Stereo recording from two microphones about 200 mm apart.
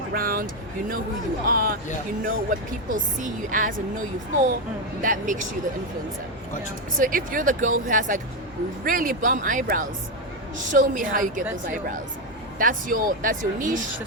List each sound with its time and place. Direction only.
0.1 s speech: 45° right (ahead or behind)
1.5 s speech: 45° right (ahead or behind)
5.0 s speech: 40° right (ahead or behind)
7.0 s speech: 45° right (ahead or behind)
12.5 s speech: 45° right (ahead or behind)